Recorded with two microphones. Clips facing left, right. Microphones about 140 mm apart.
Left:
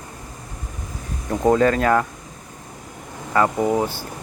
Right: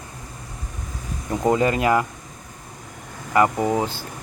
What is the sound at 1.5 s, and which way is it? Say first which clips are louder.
Speech: left 2 dB; 10° right (ahead or behind).